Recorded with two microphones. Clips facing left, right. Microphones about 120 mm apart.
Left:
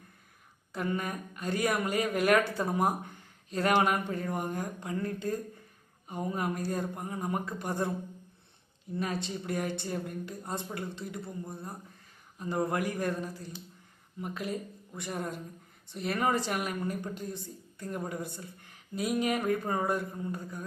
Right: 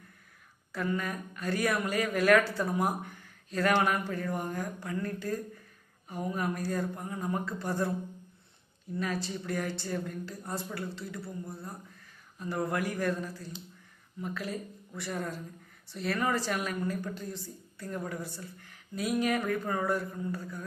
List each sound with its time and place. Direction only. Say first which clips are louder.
0.7 s a woman's voice: even; 20° left (ahead or behind)
9.0 s a woman's voice: even; 20° left (ahead or behind)